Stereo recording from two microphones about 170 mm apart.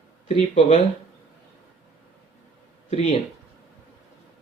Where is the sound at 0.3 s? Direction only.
40° left (ahead or behind).